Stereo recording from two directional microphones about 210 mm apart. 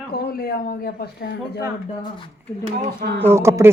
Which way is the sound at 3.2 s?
15° right (ahead or behind).